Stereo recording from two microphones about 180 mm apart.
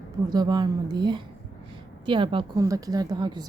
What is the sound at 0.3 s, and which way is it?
A woman's voice, 20° right (ahead or behind).